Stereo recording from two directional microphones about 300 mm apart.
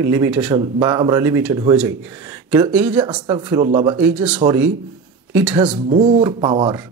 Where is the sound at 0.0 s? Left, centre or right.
Centre.